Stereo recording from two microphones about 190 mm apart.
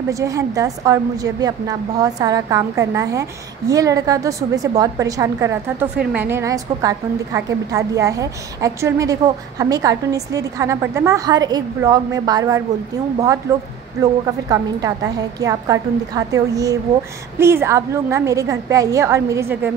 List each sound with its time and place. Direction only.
0.1 s a woman's voice: 15° right (ahead or behind)